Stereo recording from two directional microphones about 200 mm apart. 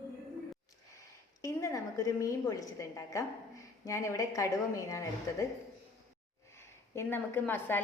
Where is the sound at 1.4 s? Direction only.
15° left (ahead or behind).